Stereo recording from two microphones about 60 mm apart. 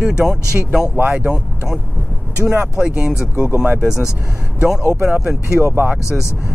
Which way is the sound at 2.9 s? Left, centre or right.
Centre.